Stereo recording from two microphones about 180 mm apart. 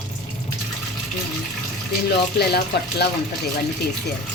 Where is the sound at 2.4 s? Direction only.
65° left (ahead or behind).